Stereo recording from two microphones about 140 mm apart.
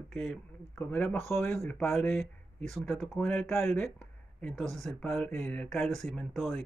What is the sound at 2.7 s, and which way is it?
Speech, 5° left (ahead or behind).